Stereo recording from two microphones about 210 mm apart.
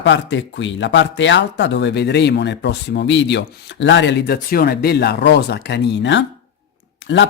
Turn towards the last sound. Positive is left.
turn(degrees=60)  # may be behind; listen again after turning